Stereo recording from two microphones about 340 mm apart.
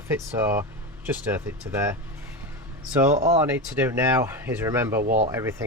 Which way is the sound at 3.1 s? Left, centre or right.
Centre.